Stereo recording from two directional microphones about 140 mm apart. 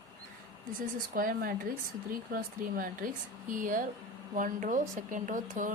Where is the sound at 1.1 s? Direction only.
90° right.